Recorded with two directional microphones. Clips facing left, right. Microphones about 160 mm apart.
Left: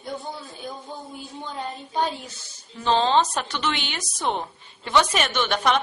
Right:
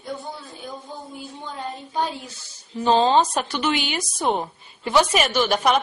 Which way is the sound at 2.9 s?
15° right (ahead or behind).